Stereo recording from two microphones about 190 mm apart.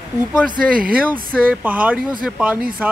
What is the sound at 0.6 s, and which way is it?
Speech, 50° right (ahead or behind).